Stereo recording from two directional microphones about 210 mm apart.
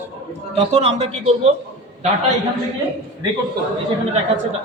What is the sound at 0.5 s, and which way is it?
Speech, 30° right (ahead or behind).